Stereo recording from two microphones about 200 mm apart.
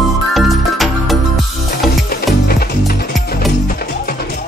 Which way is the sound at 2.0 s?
50° left (ahead or behind).